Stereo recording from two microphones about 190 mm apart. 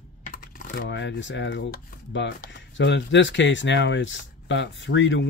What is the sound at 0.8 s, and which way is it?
Speech, 75° left (ahead or behind).